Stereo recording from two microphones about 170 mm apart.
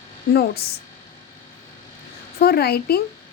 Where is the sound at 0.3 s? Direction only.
70° left (ahead or behind).